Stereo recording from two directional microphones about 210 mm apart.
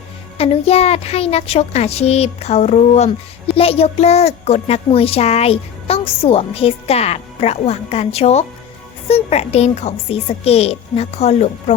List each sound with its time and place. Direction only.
0.3 s a child's voice: 30° left (ahead or behind)